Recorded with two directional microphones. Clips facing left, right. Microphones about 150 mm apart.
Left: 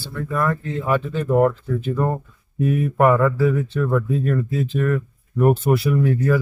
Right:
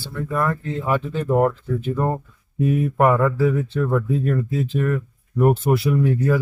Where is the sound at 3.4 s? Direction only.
30° right (ahead or behind).